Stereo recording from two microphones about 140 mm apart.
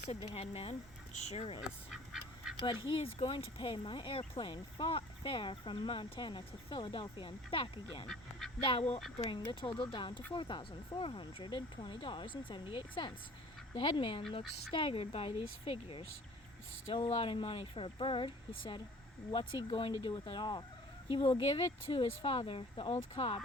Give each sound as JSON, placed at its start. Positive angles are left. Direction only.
{"t": 0.1, "sound": "speech", "side_deg": 45}
{"t": 2.1, "sound": "duck", "side_deg": 0}
{"t": 2.6, "sound": "speech", "side_deg": 35}
{"t": 8.0, "sound": "speech", "side_deg": 5}
{"t": 8.6, "sound": "speech", "side_deg": 45}